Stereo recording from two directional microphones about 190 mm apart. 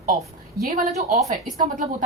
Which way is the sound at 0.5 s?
40° right (ahead or behind).